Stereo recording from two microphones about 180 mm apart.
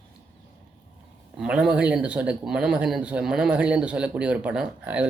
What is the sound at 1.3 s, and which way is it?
Speech, 5° right (ahead or behind).